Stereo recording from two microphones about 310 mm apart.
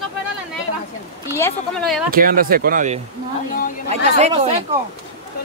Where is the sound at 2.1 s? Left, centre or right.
Right.